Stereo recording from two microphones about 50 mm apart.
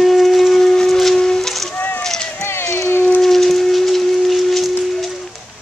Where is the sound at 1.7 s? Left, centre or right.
Left.